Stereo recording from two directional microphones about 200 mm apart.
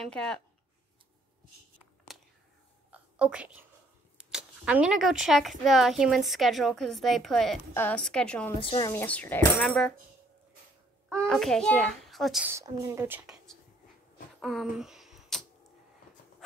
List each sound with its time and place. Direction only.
0.0 s speech: 5° left (ahead or behind)
2.1 s a sound: centre (ahead or behind)
4.2 s speech: 5° right (ahead or behind)
8.5 s a woman's voice: 25° left (ahead or behind)
8.9 s speech: 5° left (ahead or behind)
11.2 s speech: centre (ahead or behind)
12.5 s speech: 15° right (ahead or behind)
14.4 s a sound: centre (ahead or behind)